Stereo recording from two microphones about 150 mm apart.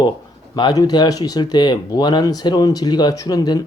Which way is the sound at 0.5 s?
30° left (ahead or behind).